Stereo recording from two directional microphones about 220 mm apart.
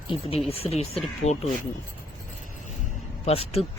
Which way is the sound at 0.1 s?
25° left (ahead or behind).